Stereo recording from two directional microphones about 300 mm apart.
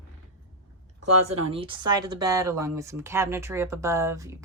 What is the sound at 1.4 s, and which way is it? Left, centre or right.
Speech, centre.